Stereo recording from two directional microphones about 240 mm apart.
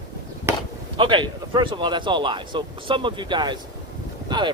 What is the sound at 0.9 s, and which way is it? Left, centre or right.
Speech, right.